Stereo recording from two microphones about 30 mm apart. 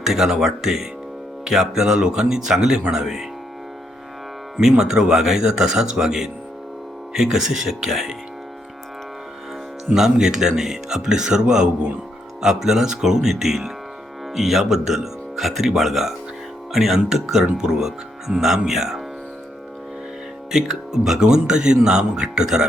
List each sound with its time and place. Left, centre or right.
0.0 s speech: centre
2.9 s speech: centre
4.8 s speech: centre
9.9 s speech: centre
17.4 s speech: right
20.5 s speech: centre